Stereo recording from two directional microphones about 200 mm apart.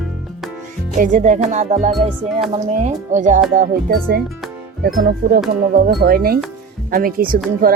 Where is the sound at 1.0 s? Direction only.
40° right (ahead or behind).